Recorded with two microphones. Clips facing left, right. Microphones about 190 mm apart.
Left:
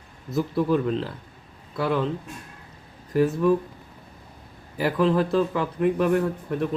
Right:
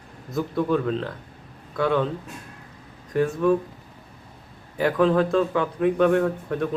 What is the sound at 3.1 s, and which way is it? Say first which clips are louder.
Speech: left 1 dB; 5° left (ahead or behind).